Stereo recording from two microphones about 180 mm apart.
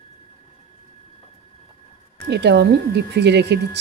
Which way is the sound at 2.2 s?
70° right (ahead or behind).